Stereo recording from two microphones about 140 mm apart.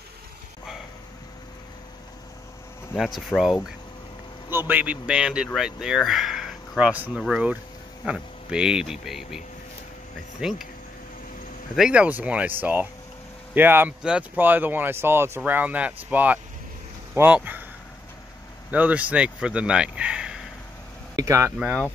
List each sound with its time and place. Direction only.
3.2 s speech: centre (ahead or behind)
4.5 s speech: 15° right (ahead or behind)
10.4 s speech: 5° right (ahead or behind)
11.7 s speech: 5° right (ahead or behind)
18.7 s speech: 10° right (ahead or behind)
21.2 s speech: 20° right (ahead or behind)